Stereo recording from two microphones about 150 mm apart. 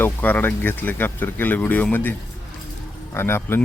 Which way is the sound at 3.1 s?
15° left (ahead or behind).